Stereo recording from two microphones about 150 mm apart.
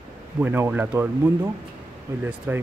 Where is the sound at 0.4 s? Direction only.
10° right (ahead or behind).